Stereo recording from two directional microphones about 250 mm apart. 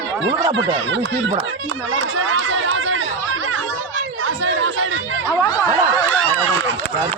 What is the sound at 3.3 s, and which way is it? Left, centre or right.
Chatter, right.